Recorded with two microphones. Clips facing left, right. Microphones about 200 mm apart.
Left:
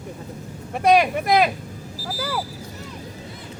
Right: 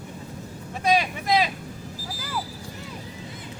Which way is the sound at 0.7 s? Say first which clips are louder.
Left 6 dB; 60° left (ahead or behind).